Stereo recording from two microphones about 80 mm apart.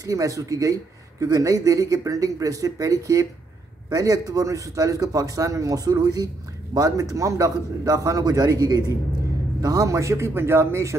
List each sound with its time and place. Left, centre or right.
0.0 s a man's voice: right